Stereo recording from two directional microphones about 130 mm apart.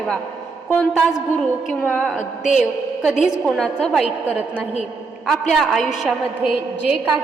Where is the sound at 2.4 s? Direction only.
70° left (ahead or behind).